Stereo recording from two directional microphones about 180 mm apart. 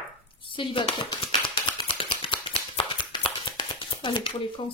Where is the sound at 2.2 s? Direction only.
30° left (ahead or behind).